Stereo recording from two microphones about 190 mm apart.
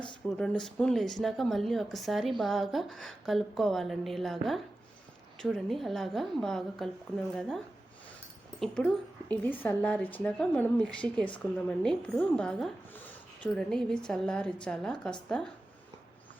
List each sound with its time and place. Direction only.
0.3 s speech: 5° left (ahead or behind)
8.6 s speech: 5° left (ahead or behind)